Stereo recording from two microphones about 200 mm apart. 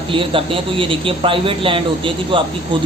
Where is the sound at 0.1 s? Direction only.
25° right (ahead or behind).